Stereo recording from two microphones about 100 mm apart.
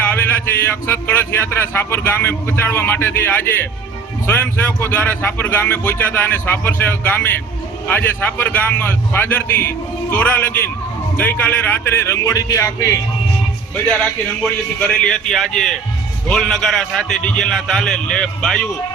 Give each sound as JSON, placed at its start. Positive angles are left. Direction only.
{"t": 0.0, "sound": "speech", "side_deg": 20}
{"t": 13.8, "sound": "a man's voice", "side_deg": 15}